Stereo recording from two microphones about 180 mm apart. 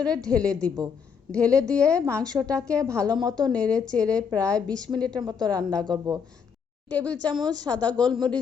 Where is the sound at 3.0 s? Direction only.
20° right (ahead or behind).